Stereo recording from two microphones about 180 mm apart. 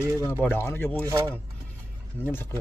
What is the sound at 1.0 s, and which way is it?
Speech, 15° right (ahead or behind).